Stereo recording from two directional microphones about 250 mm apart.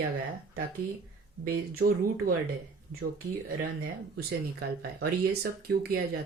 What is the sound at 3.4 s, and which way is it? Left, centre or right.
Speech, right.